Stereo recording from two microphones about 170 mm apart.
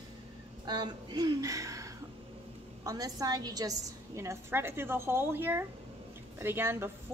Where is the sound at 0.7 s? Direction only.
25° right (ahead or behind).